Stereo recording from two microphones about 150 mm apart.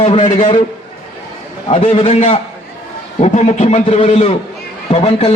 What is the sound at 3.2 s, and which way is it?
A man's voice, 50° left (ahead or behind).